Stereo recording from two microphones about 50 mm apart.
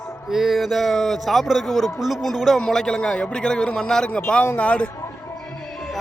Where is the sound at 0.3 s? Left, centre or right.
Centre.